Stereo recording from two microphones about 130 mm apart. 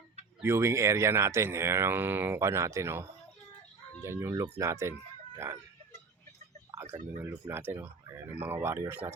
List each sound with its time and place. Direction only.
0.4 s speech: 20° right (ahead or behind)
7.2 s speech: 20° right (ahead or behind)